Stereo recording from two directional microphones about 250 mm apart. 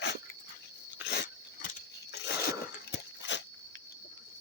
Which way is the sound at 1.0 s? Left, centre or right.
Left.